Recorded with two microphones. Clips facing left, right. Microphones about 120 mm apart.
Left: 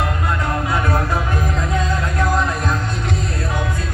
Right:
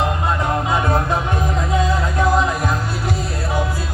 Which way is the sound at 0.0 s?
20° right (ahead or behind).